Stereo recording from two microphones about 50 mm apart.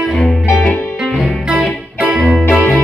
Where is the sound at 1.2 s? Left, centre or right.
Centre.